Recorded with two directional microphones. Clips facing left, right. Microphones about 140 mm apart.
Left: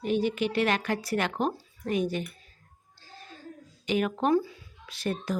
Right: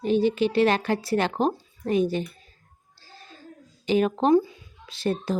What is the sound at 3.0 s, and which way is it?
Music, 35° right (ahead or behind).